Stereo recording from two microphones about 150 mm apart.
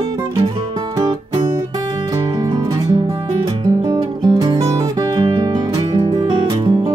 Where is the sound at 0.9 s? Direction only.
25° right (ahead or behind).